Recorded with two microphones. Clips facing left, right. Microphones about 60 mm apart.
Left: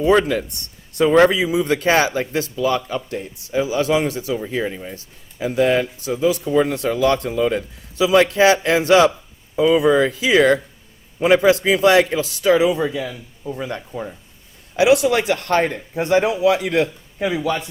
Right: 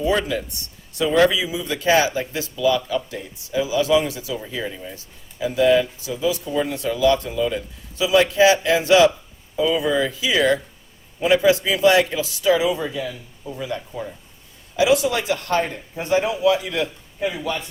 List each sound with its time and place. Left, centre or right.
0.3 s a man's voice: left
4.5 s speech: left
5.4 s a man's voice: left
12.8 s a man's voice: left
13.6 s speech: left
14.8 s a man's voice: left